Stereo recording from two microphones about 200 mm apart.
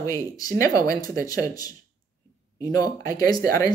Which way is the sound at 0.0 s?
15° left (ahead or behind).